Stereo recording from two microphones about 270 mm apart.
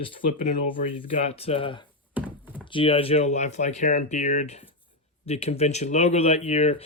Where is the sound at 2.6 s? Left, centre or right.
Centre.